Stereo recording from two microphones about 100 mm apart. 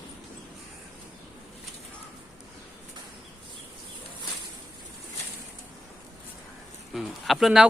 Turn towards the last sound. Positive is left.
turn(degrees=-5)  # may be behind; listen again after turning